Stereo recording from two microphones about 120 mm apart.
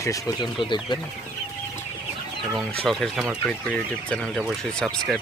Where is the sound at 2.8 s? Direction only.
Centre (ahead or behind).